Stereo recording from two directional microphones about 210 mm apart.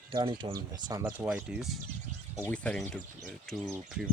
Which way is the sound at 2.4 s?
5° left (ahead or behind).